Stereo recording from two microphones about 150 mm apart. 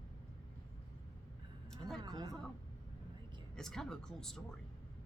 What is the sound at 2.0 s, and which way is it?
Speech, 25° right (ahead or behind).